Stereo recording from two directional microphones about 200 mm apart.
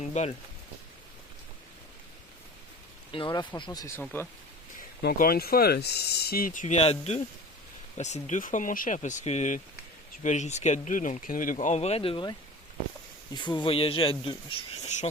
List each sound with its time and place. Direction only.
0.0 s speech: 35° left (ahead or behind)
3.1 s speech: 25° left (ahead or behind)
5.0 s speech: 45° left (ahead or behind); by 14.3 s 25° left (ahead or behind)